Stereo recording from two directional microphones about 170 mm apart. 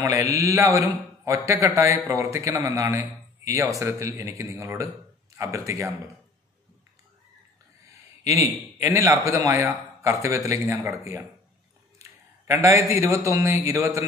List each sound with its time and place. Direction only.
0.0 s a man's voice: 20° right (ahead or behind)
8.2 s a man's voice: 20° right (ahead or behind)